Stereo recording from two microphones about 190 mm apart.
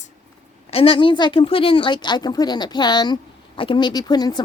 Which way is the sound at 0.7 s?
30° left (ahead or behind).